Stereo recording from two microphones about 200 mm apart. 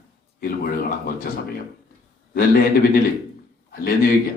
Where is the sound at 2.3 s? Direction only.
45° left (ahead or behind).